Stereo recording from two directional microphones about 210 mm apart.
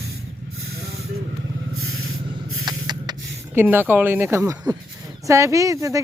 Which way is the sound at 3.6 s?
10° right (ahead or behind).